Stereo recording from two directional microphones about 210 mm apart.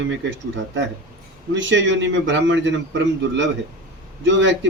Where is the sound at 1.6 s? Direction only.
60° right (ahead or behind).